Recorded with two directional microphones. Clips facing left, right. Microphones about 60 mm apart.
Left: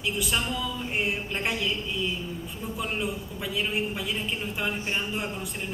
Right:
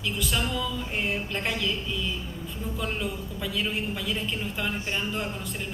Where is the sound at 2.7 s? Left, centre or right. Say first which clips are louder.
Left 1 dB; centre.